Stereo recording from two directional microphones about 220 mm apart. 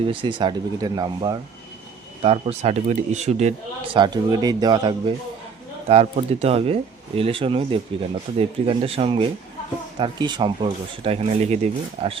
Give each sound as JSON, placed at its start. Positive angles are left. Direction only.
{"t": 0.0, "sound": "speech", "side_deg": -25}
{"t": 3.9, "sound": "speech", "side_deg": -20}